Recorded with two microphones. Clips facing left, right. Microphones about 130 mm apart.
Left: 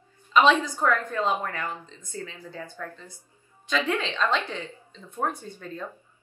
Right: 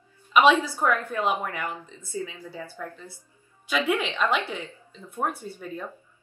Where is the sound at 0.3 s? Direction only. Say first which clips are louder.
Right 1 dB; 15° right (ahead or behind).